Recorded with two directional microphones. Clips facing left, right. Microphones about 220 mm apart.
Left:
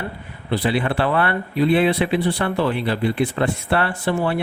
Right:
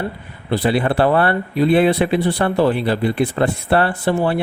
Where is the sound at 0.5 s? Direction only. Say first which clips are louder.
Right 3 dB; 40° right (ahead or behind).